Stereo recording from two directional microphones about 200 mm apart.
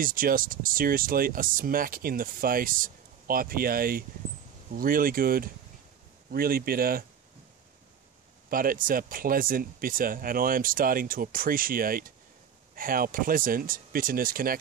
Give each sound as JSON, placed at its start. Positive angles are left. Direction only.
{"t": 0.0, "sound": "speech", "side_deg": -45}
{"t": 8.5, "sound": "speech", "side_deg": -45}